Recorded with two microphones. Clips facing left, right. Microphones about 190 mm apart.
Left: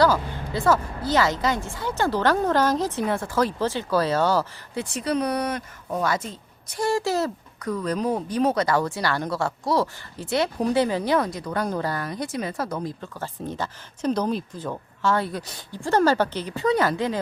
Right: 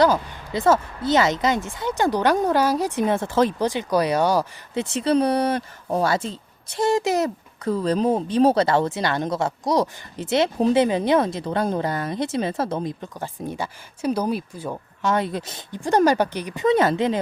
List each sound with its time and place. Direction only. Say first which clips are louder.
0.0 s speech: right 2 dB; 20° right (ahead or behind)
7.7 s speech: right 4 dB; 30° right (ahead or behind)